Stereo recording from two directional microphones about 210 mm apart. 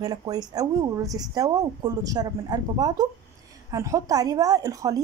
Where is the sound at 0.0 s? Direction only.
20° right (ahead or behind).